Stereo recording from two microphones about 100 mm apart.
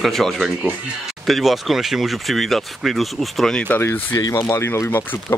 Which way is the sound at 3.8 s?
25° left (ahead or behind).